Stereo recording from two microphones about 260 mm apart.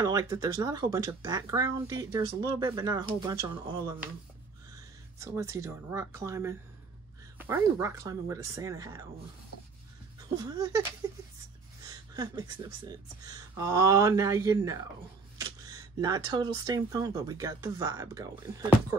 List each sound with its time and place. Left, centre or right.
0.0 s speech: centre
5.2 s speech: centre
10.3 s speech: centre